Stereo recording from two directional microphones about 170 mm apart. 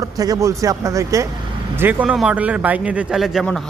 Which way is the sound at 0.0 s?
20° right (ahead or behind).